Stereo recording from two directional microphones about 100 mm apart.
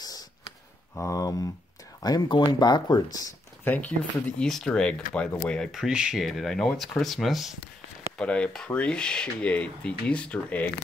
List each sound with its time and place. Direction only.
0.9 s speech: 35° left (ahead or behind)
3.6 s speech: 15° left (ahead or behind)
5.7 s speech: 5° right (ahead or behind)
8.2 s speech: 10° left (ahead or behind)